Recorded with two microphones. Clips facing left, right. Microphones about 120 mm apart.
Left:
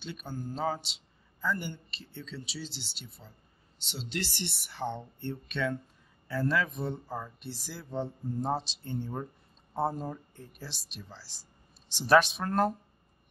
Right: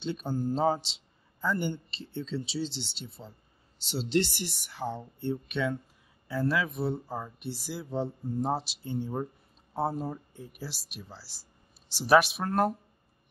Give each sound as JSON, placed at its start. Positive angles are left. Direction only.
{"t": 0.0, "sound": "speech", "side_deg": -30}
{"t": 4.4, "sound": "speech", "side_deg": 0}